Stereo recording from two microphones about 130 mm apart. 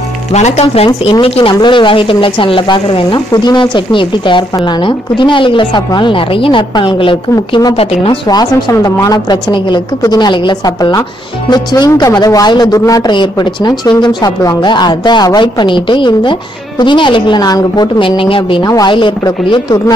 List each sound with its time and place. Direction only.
0.3 s speech: 60° left (ahead or behind)
0.8 s speech: 40° left (ahead or behind)
8.3 s speech: 30° left (ahead or behind)